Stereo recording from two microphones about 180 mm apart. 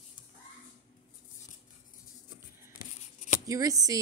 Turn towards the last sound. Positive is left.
turn(degrees=-20)  # may be behind; listen again after turning